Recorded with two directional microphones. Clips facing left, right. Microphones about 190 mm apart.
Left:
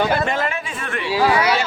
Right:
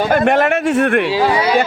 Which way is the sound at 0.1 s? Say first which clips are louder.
Right 8 dB; 65° right (ahead or behind).